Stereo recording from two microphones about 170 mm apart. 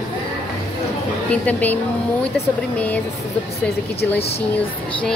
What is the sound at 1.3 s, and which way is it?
Speech, 10° left (ahead or behind).